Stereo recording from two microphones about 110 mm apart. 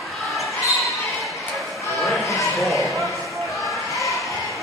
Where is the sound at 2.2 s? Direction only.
30° left (ahead or behind).